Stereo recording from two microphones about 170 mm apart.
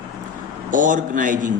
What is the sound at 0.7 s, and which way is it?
Speech, 50° right (ahead or behind).